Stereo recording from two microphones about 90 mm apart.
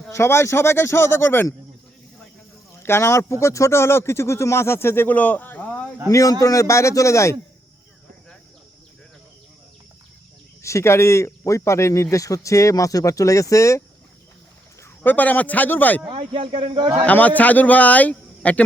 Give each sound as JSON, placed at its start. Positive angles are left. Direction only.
{"t": 0.1, "sound": "speech", "side_deg": 30}
{"t": 2.8, "sound": "speech", "side_deg": 30}
{"t": 6.1, "sound": "speech", "side_deg": 35}
{"t": 10.6, "sound": "speech", "side_deg": 35}
{"t": 15.0, "sound": "speech", "side_deg": 20}
{"t": 16.0, "sound": "speech", "side_deg": -65}
{"t": 17.1, "sound": "speech", "side_deg": 15}